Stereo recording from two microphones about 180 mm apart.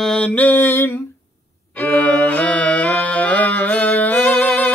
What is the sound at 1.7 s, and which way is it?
Music, 10° left (ahead or behind).